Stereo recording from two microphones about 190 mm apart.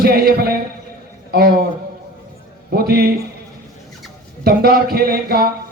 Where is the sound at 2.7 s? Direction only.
55° right (ahead or behind).